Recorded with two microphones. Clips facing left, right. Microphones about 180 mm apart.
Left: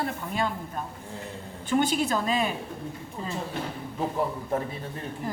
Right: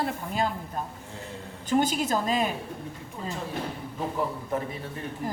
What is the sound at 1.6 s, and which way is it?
Speech, 40° right (ahead or behind).